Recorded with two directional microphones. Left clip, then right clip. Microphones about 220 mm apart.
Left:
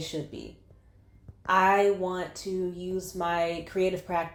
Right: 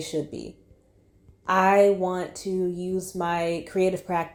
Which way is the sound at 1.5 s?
35° right (ahead or behind).